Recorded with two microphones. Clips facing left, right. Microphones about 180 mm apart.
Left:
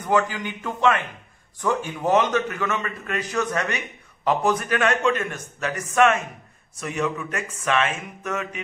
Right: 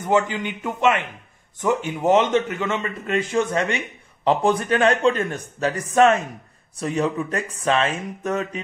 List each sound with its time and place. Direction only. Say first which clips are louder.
0.0 s a man's voice: right 2 dB; 25° right (ahead or behind)